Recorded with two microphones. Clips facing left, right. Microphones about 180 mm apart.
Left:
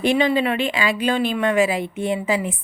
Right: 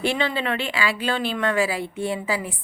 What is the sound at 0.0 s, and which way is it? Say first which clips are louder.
Speech: left 6 dB; 15° left (ahead or behind).